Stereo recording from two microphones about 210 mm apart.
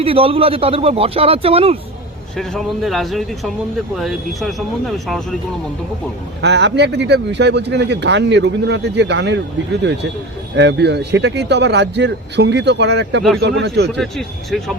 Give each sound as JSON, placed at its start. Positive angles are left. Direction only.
{"t": 0.0, "sound": "a man's voice", "side_deg": -25}
{"t": 2.4, "sound": "speech", "side_deg": 0}
{"t": 6.4, "sound": "speech", "side_deg": -55}
{"t": 10.6, "sound": "speech", "side_deg": -55}
{"t": 14.0, "sound": "speech", "side_deg": 0}